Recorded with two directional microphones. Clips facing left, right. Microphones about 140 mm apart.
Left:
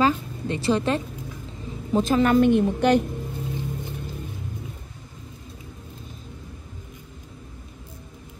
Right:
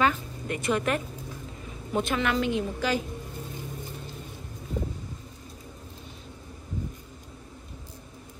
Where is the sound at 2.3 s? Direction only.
55° left (ahead or behind).